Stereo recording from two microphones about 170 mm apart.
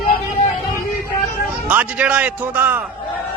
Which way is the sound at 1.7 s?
5° right (ahead or behind).